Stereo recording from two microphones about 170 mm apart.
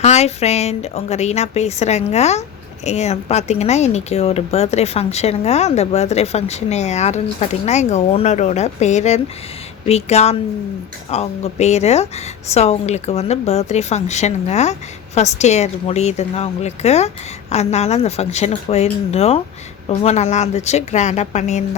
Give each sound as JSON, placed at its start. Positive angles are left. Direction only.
{"t": 0.0, "sound": "speech", "side_deg": 40}